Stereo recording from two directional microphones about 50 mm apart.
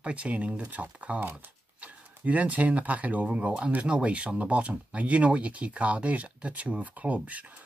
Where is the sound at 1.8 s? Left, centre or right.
Right.